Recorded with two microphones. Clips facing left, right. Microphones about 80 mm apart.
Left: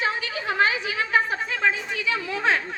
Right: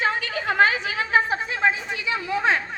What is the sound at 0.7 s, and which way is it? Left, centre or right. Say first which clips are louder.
A woman's voice: right 1 dB; right.